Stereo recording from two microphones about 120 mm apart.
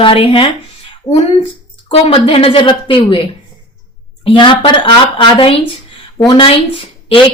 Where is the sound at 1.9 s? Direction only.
50° left (ahead or behind).